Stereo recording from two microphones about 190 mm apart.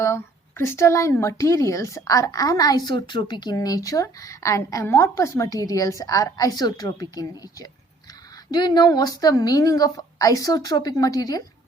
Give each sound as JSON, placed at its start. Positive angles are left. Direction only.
{"t": 0.6, "sound": "a woman's voice", "side_deg": 15}